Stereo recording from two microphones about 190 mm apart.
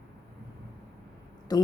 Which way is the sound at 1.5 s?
20° left (ahead or behind).